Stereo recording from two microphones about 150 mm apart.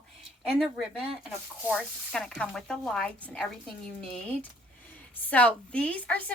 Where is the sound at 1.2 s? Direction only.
Centre (ahead or behind).